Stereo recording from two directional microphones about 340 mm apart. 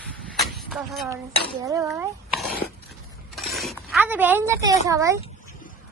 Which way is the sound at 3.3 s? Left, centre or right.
Centre.